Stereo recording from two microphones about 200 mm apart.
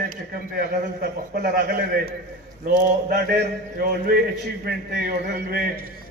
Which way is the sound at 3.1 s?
50° right (ahead or behind).